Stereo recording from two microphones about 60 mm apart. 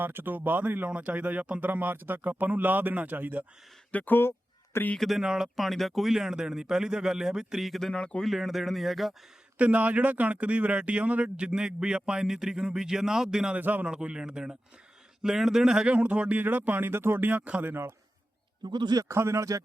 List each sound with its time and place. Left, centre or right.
0.0 s speech: right
3.9 s speech: left
4.9 s speech: centre
9.6 s speech: right
13.6 s speech: right
13.8 s speech: centre
16.0 s speech: right
19.0 s speech: right